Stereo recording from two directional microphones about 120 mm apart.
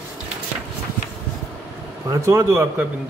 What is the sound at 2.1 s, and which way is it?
Speech, 25° right (ahead or behind).